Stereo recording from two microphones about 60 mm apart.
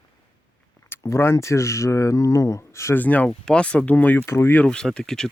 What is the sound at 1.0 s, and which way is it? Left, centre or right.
Speech, left.